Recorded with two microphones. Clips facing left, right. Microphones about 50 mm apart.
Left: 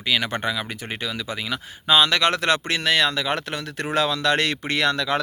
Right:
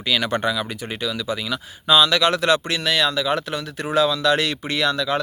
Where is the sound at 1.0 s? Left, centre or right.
Left.